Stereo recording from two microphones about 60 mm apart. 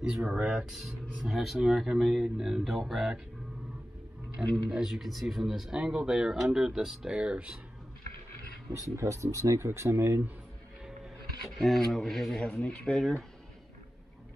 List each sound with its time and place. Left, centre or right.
0.0 s speech: centre
0.7 s speech: centre
4.6 s speech: centre
8.9 s speech: right
9.7 s speech: right
11.4 s speech: centre